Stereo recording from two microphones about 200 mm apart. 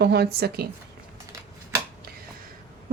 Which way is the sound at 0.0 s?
55° right (ahead or behind).